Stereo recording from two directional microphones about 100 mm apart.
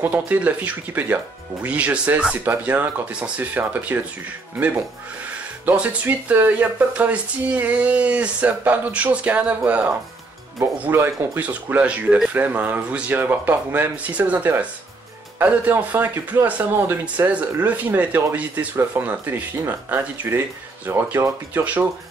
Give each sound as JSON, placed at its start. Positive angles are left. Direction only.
{"t": 0.0, "sound": "speech", "side_deg": -20}
{"t": 11.4, "sound": "speech", "side_deg": -15}